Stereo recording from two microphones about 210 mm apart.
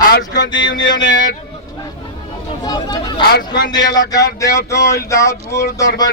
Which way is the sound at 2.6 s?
20° left (ahead or behind).